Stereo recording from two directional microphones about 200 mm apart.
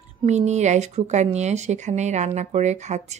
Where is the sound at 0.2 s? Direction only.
35° right (ahead or behind).